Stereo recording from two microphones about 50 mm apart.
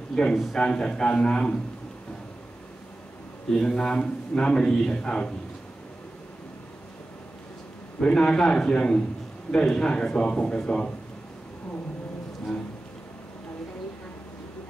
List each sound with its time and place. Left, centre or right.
0.1 s a man's voice: centre
3.4 s a man's voice: centre
8.0 s a man's voice: centre